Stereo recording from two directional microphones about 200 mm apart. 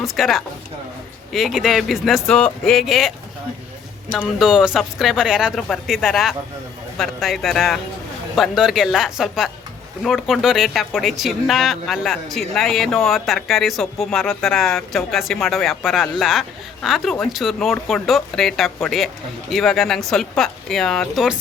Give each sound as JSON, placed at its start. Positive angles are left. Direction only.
{"t": 0.0, "sound": "speech", "side_deg": 0}
{"t": 4.2, "sound": "speech", "side_deg": 0}